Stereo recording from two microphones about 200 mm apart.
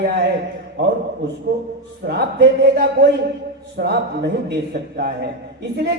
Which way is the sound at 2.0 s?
60° right (ahead or behind).